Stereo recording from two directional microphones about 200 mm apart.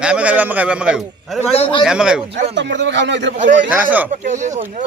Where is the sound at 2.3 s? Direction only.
60° right (ahead or behind).